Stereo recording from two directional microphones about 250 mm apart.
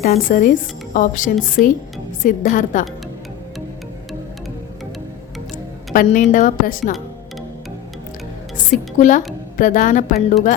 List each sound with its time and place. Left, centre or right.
0.0 s a woman's voice: left
5.9 s a woman's voice: left
9.0 s a woman's voice: left